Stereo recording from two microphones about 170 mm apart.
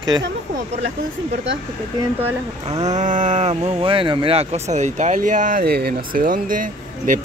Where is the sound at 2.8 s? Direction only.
45° right (ahead or behind).